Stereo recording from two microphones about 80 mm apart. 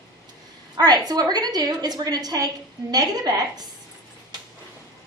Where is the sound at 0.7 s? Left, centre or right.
Right.